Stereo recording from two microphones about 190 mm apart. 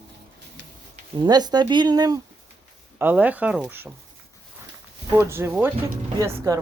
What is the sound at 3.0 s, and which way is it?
Speech, 10° right (ahead or behind).